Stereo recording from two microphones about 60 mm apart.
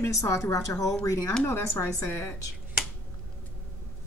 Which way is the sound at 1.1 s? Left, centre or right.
Left.